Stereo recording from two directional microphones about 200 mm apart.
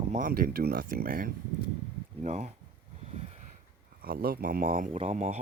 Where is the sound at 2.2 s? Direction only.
35° right (ahead or behind).